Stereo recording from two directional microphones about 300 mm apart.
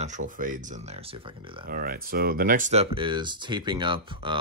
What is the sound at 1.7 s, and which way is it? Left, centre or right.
Speech, right.